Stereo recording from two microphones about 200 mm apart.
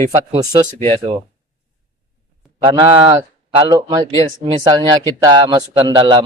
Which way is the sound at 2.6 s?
25° right (ahead or behind).